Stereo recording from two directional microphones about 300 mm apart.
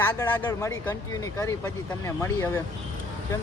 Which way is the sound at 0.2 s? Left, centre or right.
Centre.